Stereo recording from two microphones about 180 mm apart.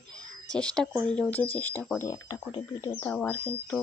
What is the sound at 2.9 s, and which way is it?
Speech, 10° left (ahead or behind).